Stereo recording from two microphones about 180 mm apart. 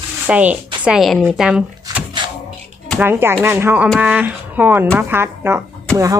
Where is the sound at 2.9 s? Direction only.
10° right (ahead or behind).